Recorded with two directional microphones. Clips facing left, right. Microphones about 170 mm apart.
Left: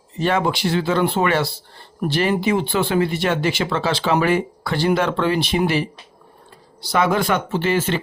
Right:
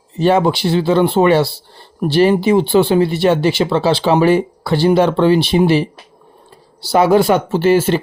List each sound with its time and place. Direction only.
0.2 s speech: 30° right (ahead or behind)
6.9 s speech: 35° right (ahead or behind)